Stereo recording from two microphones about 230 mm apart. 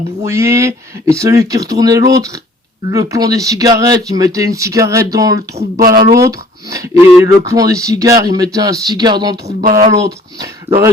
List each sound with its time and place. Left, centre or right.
0.3 s speech: centre
5.5 s speech: right
6.1 s speech: centre